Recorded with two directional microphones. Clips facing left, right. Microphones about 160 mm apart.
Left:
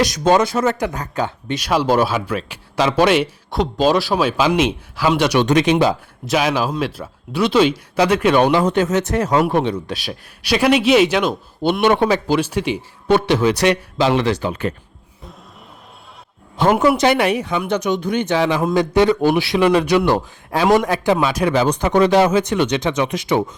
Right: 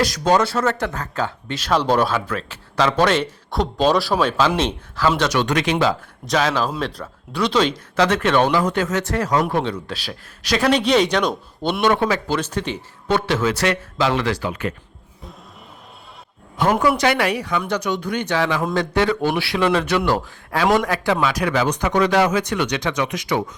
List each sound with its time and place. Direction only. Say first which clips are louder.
0.0 s speech: left 3 dB; 20° left (ahead or behind)
3.5 s speech: left 2 dB; centre (ahead or behind)
11.8 s speech: left 2 dB; 20° left (ahead or behind)
12.4 s speech: left 5 dB; 10° left (ahead or behind); by 14.8 s 30° left (ahead or behind)
16.6 s speech: left 3 dB; 30° left (ahead or behind)